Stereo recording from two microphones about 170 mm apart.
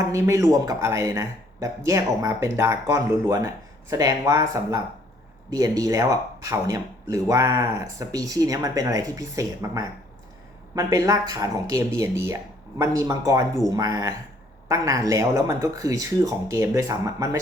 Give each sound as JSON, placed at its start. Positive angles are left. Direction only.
{"t": 0.0, "sound": "speech", "side_deg": -20}